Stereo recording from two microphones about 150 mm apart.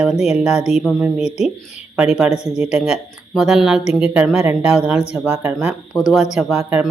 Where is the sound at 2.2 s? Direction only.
45° left (ahead or behind).